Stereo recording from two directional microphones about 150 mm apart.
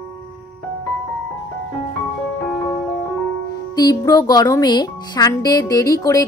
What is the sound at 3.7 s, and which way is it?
Speech, 25° left (ahead or behind).